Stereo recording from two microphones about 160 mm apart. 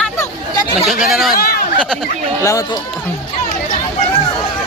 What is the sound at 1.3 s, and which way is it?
Speech, 70° left (ahead or behind).